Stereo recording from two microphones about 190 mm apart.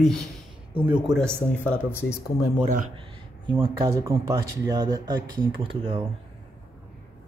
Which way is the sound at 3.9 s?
15° right (ahead or behind).